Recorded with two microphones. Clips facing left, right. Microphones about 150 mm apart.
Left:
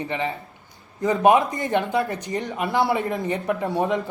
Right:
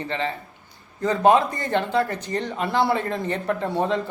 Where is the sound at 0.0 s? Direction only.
15° left (ahead or behind).